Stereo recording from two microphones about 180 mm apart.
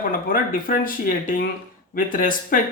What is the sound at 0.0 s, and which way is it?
Speech, 50° left (ahead or behind).